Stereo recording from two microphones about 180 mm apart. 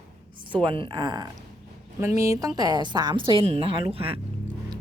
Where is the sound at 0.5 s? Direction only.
30° right (ahead or behind).